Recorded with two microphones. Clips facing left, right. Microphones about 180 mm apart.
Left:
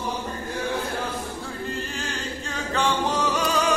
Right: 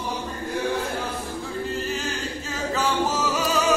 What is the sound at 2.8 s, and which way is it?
Music, 5° right (ahead or behind).